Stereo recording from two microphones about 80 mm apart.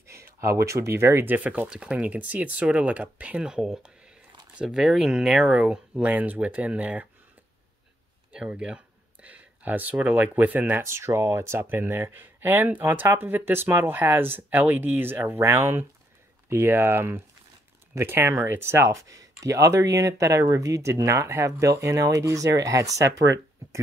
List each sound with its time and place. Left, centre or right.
0.0 s speech: right; by 7.1 s centre
8.3 s speech: centre
10.8 s speech: right